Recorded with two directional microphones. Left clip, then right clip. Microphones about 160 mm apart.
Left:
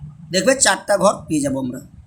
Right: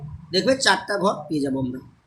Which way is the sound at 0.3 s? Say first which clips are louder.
Left 3 dB; 65° left (ahead or behind).